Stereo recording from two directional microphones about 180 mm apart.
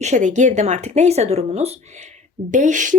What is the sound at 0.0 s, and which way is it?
A woman's voice, 40° right (ahead or behind).